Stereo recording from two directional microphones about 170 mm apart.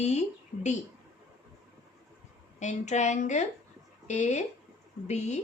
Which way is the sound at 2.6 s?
45° left (ahead or behind).